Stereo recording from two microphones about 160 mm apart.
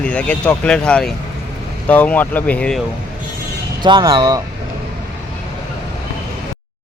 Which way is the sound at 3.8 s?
30° right (ahead or behind).